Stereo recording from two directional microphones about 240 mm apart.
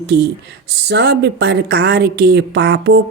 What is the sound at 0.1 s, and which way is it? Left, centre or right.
Speech, right.